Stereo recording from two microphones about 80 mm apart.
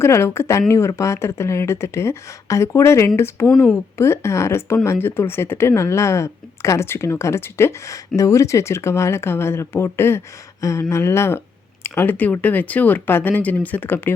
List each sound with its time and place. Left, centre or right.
0.0 s speech: left
8.1 s speech: left